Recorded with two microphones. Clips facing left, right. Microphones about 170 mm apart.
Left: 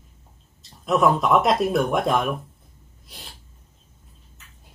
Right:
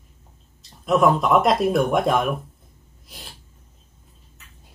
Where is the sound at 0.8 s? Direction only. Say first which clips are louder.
Right 1 dB; centre (ahead or behind).